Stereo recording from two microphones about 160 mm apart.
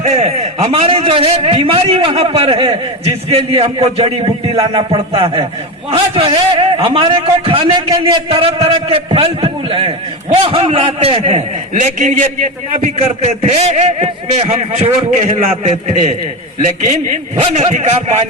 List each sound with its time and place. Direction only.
0.0 s a man's voice: 40° right (ahead or behind)
11.7 s a man's voice: 55° right (ahead or behind)